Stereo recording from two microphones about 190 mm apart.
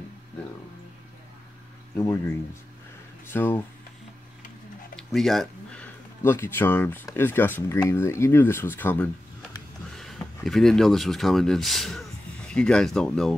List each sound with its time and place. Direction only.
2.0 s speech: 15° left (ahead or behind)
4.9 s speech: centre (ahead or behind)